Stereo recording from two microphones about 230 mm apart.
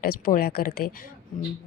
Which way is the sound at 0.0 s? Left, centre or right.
Left.